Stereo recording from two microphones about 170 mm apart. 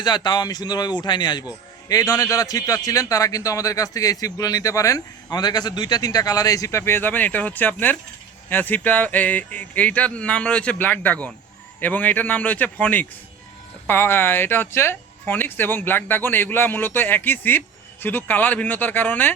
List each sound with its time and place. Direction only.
0.0 s a man's voice: 25° left (ahead or behind)